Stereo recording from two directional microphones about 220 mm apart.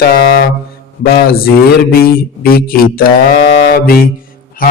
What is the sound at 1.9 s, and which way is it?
Speech, 40° left (ahead or behind).